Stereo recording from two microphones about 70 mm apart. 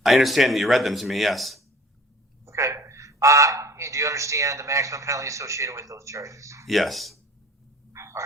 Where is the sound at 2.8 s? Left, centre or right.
Right.